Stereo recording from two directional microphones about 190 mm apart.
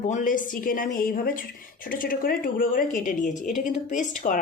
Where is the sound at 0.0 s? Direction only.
45° left (ahead or behind).